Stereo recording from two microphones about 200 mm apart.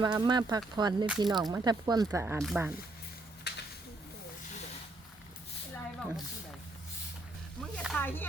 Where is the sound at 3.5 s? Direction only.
60° left (ahead or behind).